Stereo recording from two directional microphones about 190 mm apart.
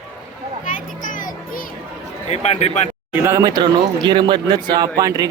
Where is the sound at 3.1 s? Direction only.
15° right (ahead or behind).